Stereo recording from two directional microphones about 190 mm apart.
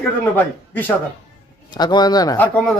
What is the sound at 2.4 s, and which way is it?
Speech, 5° left (ahead or behind).